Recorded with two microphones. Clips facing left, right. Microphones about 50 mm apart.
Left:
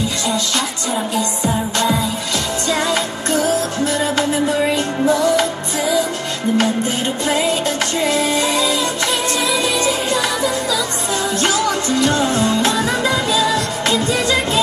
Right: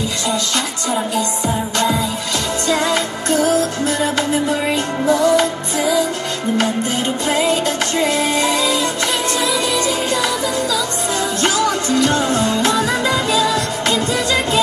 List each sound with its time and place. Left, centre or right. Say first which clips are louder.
3.3 s music: right 1 dB; right
8.0 s music: even; right
12.1 s music: even; right
13.4 s music: even; left